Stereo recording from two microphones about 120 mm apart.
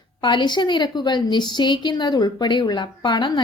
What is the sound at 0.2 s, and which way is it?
A woman's voice, 40° left (ahead or behind).